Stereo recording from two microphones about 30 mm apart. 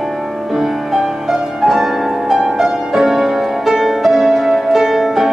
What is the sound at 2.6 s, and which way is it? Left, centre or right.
Music, centre.